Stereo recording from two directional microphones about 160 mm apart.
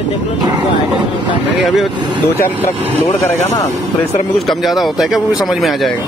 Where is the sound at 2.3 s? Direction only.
15° left (ahead or behind).